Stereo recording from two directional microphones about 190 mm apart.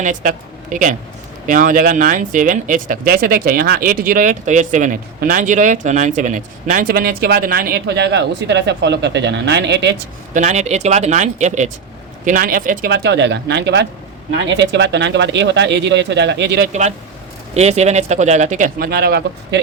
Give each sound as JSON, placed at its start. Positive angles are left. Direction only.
{"t": 0.0, "sound": "a woman's voice", "side_deg": -45}
{"t": 10.3, "sound": "speech", "side_deg": -40}
{"t": 17.5, "sound": "speech", "side_deg": -35}